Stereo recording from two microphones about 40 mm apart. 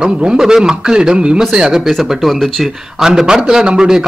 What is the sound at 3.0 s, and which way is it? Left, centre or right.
Speech, centre.